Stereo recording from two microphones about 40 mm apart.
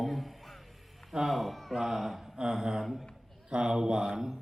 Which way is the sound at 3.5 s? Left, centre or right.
Centre.